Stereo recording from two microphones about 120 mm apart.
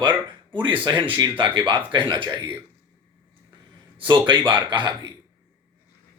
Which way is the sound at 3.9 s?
40° right (ahead or behind).